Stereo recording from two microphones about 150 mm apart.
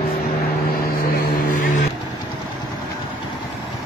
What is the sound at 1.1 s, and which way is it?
Vehicle, 65° left (ahead or behind).